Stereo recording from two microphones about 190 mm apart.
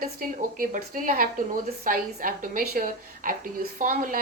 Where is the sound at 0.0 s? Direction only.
50° right (ahead or behind).